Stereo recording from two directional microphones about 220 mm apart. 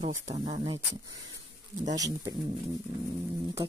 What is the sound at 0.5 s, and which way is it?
Speech, 20° right (ahead or behind).